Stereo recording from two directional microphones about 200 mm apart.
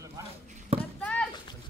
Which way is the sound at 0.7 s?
30° right (ahead or behind).